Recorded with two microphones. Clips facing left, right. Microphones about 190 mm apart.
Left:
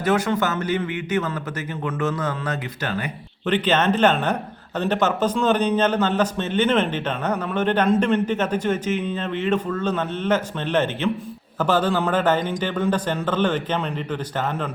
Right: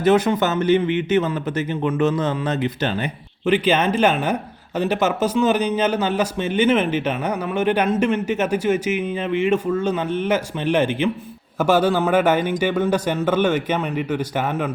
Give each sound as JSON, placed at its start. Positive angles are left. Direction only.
{"t": 0.0, "sound": "a man's voice", "side_deg": -20}
{"t": 3.4, "sound": "a man's voice", "side_deg": -10}